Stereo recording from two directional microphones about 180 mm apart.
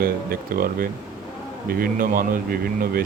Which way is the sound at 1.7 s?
50° right (ahead or behind).